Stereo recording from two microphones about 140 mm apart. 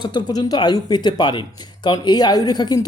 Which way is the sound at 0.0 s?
30° left (ahead or behind).